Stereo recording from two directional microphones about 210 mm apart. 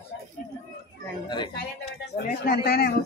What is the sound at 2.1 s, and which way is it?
Speech, 45° left (ahead or behind).